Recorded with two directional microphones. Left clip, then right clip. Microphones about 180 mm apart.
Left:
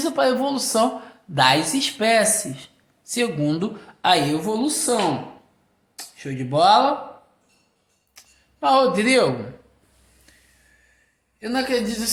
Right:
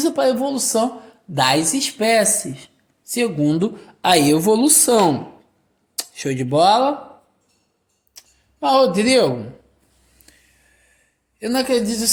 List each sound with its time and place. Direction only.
0.0 s speech: 40° right (ahead or behind)
4.1 s a woman's voice: 60° right (ahead or behind)
6.0 s speech: 70° right (ahead or behind); by 6.8 s 50° right (ahead or behind)
8.2 s a sound: 45° right (ahead or behind)
8.6 s speech: 45° right (ahead or behind)
10.3 s a sound: 55° right (ahead or behind)
11.3 s a woman's voice: 55° right (ahead or behind)